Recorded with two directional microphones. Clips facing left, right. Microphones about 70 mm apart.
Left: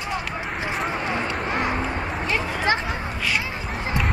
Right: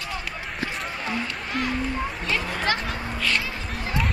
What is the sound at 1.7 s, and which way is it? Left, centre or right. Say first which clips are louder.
Music: left 1 dB; left.